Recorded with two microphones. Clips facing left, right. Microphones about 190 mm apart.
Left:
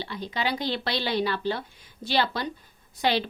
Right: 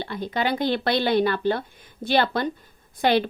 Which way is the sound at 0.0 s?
50° right (ahead or behind).